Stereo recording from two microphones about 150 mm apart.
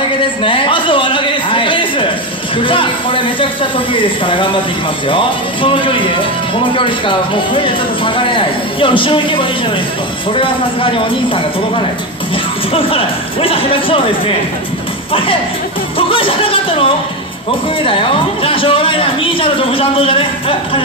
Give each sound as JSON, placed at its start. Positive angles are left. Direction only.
{"t": 0.2, "sound": "a sound", "side_deg": 35}
{"t": 2.6, "sound": "a man's voice", "side_deg": 35}
{"t": 12.7, "sound": "a man's voice", "side_deg": 40}
{"t": 16.0, "sound": "music", "side_deg": 35}
{"t": 17.8, "sound": "a man's voice", "side_deg": 40}